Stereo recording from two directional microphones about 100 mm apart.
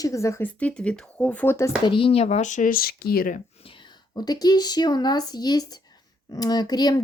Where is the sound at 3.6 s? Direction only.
55° left (ahead or behind).